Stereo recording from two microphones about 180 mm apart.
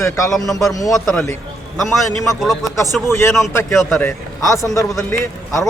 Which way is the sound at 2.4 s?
Centre (ahead or behind).